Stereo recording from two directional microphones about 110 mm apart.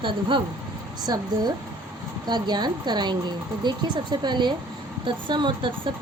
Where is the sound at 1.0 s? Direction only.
35° right (ahead or behind).